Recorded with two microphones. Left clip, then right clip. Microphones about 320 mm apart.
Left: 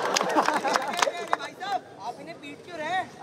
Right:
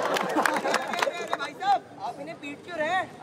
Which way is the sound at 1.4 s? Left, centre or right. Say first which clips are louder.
Right 6 dB; centre.